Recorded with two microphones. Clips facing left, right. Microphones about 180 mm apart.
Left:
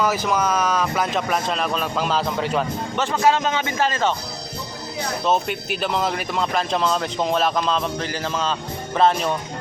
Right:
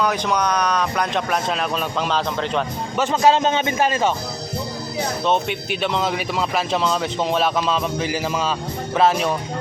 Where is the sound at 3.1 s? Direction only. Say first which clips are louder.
Right 3 dB; 25° right (ahead or behind).